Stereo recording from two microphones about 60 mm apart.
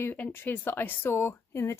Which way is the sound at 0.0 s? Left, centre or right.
Left.